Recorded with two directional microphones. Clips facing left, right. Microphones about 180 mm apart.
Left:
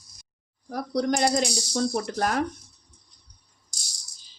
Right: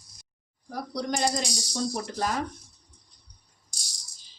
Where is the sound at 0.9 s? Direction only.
55° left (ahead or behind).